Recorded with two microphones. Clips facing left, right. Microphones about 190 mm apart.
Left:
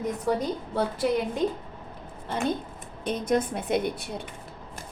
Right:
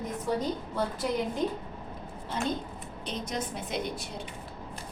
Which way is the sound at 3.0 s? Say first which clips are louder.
Left 9 dB; 55° left (ahead or behind).